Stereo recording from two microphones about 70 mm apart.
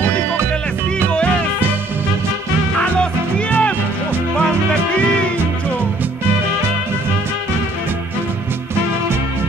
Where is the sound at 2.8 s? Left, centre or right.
Centre.